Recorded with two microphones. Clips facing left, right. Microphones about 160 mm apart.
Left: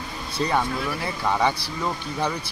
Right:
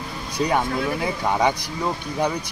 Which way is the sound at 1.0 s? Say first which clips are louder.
Right 1 dB; 15° right (ahead or behind).